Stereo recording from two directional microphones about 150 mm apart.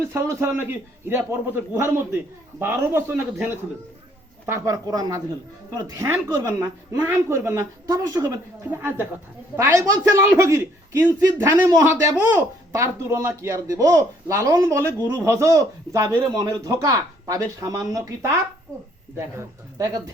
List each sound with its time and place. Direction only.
0.0 s a man's voice: 20° right (ahead or behind)